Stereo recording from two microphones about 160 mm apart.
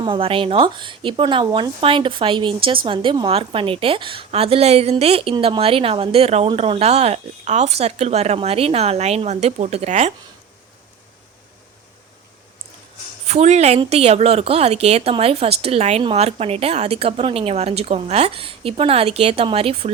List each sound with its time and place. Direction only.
0.0 s a woman's voice: 35° right (ahead or behind)
13.2 s a woman's voice: 40° right (ahead or behind)